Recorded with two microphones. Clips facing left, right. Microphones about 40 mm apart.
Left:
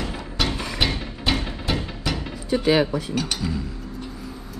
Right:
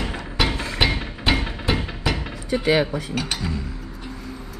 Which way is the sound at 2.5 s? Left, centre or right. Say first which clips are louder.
Even; right.